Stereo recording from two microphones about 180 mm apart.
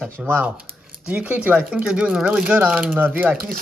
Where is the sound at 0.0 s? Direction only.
10° right (ahead or behind).